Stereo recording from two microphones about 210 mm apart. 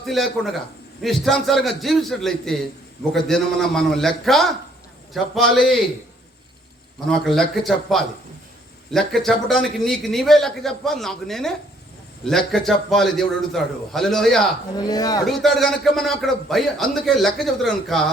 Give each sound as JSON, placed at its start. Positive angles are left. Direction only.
{"t": 0.0, "sound": "a man's voice", "side_deg": 0}
{"t": 7.0, "sound": "a man's voice", "side_deg": 0}
{"t": 14.8, "sound": "speech", "side_deg": 20}
{"t": 15.3, "sound": "a man's voice", "side_deg": 0}